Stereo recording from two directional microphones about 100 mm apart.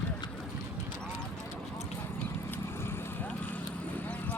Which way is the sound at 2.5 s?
25° left (ahead or behind).